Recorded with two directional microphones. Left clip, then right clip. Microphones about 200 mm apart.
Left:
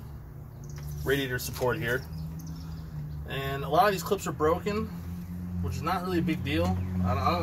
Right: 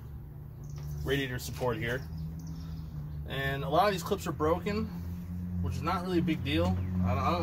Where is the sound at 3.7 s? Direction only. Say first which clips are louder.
Left 4 dB; 15° left (ahead or behind).